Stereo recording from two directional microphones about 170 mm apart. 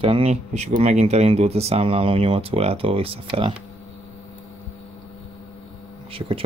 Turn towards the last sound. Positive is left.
turn(degrees=-30)  # may be behind; listen again after turning